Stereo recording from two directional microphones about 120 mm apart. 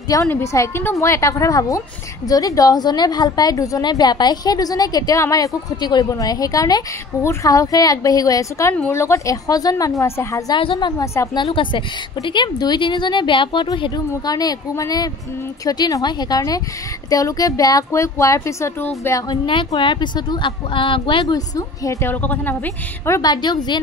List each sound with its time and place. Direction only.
0.1 s a woman's voice: 25° left (ahead or behind)
10.5 s a woman's voice: 45° left (ahead or behind); by 19.2 s 20° left (ahead or behind)
19.2 s a woman's voice: 40° left (ahead or behind)
21.5 s speech: 25° left (ahead or behind)
22.1 s a woman's voice: 15° left (ahead or behind)
23.3 s a woman's voice: 35° left (ahead or behind)